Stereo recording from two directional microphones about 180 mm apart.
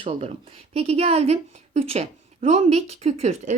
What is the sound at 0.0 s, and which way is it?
A woman's voice, 30° right (ahead or behind).